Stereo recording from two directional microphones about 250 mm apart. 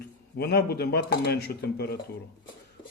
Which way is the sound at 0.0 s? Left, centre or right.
Left.